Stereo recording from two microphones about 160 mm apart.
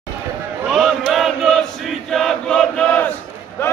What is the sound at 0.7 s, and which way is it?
Chant, centre (ahead or behind).